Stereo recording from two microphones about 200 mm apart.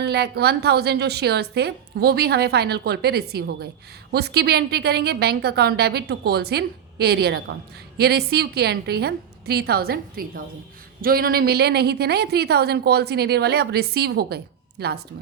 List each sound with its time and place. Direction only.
0.0 s a woman's voice: 55° right (ahead or behind)